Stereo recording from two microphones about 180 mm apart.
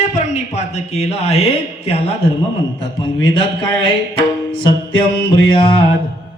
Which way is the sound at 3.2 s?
25° left (ahead or behind).